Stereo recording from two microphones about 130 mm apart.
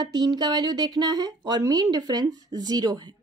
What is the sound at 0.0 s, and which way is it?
Speech, 35° right (ahead or behind).